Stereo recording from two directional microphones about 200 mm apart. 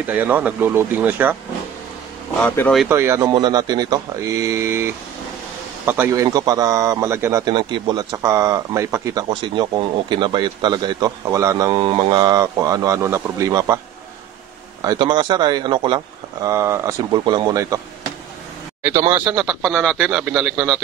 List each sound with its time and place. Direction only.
0.0 s a man's voice: 10° right (ahead or behind)
2.4 s speech: 5° left (ahead or behind)
2.8 s a man's voice: 10° right (ahead or behind)
14.8 s a man's voice: 20° right (ahead or behind)
16.4 s a man's voice: 15° right (ahead or behind)
19.1 s speech: 5° right (ahead or behind)